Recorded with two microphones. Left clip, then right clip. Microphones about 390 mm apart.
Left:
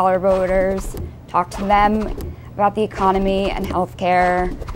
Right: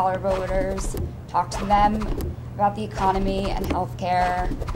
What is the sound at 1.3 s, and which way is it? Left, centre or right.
Speech, left.